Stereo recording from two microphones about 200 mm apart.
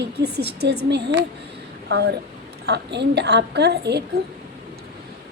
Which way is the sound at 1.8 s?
55° right (ahead or behind).